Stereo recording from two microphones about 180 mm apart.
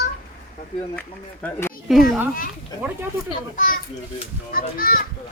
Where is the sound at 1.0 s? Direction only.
10° left (ahead or behind).